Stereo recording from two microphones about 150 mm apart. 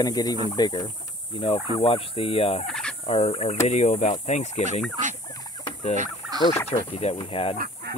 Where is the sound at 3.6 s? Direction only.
50° left (ahead or behind).